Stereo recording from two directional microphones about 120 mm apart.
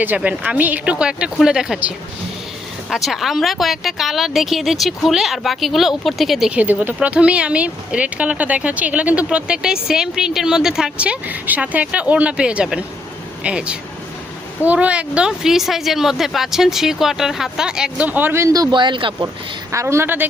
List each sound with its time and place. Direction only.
0.0 s speech: 15° right (ahead or behind)
2.9 s speech: centre (ahead or behind); by 19.3 s 40° right (ahead or behind)
19.7 s a woman's voice: 25° right (ahead or behind)